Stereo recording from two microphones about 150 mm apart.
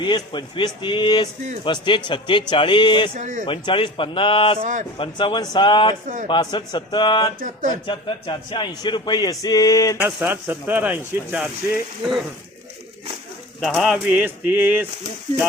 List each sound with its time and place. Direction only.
0.0 s speech: 30° left (ahead or behind)
3.2 s speech: 55° right (ahead or behind)
3.4 s speech: 35° left (ahead or behind)
4.6 s speech: 55° right (ahead or behind)
4.9 s speech: 30° left (ahead or behind)
7.3 s speech: 60° right (ahead or behind)
7.9 s speech: 35° left (ahead or behind)
10.0 s speech: 15° right (ahead or behind)
13.6 s speech: centre (ahead or behind)